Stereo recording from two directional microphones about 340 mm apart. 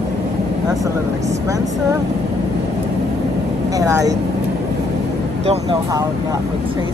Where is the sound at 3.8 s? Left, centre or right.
Centre.